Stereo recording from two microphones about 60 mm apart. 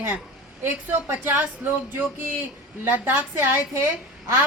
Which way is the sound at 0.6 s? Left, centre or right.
Right.